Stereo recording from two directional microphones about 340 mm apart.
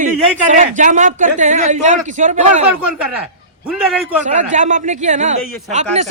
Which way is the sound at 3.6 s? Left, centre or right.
Centre.